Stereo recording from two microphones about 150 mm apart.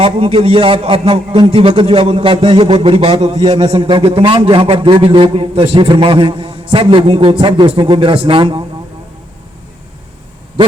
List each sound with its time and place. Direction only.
0.0 s a man's voice: 40° right (ahead or behind)